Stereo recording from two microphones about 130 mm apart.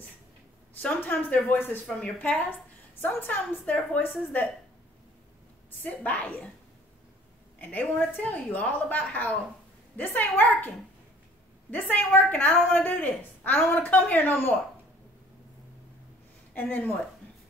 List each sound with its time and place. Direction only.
0.8 s a woman's voice: 15° left (ahead or behind)
5.9 s a woman's voice: 10° left (ahead or behind)
7.5 s a woman's voice: 10° left (ahead or behind)
11.7 s a woman's voice: 15° left (ahead or behind)
16.5 s a woman's voice: 10° left (ahead or behind)